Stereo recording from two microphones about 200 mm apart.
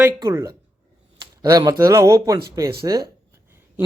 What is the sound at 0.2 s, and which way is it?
Speech, 15° right (ahead or behind).